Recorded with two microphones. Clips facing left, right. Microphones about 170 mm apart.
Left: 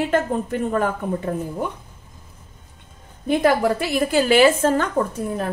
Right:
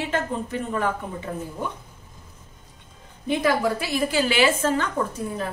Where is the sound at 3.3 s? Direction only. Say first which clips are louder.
Left 4 dB; 55° left (ahead or behind).